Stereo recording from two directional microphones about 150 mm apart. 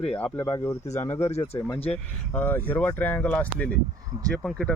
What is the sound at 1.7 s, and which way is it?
Speech, 40° left (ahead or behind).